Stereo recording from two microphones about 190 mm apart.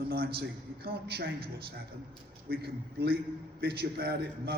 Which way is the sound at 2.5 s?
55° right (ahead or behind).